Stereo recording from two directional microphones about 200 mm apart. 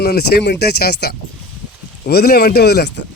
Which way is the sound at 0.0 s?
50° left (ahead or behind).